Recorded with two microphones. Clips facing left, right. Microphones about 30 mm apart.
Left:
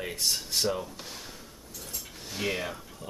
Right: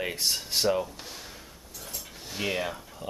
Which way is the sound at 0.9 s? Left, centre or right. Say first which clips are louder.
Even; centre.